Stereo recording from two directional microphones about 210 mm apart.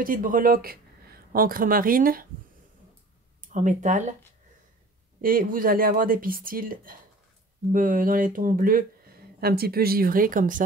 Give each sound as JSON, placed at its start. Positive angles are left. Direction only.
{"t": 0.0, "sound": "speech", "side_deg": -40}
{"t": 3.5, "sound": "speech", "side_deg": -35}
{"t": 5.2, "sound": "speech", "side_deg": -40}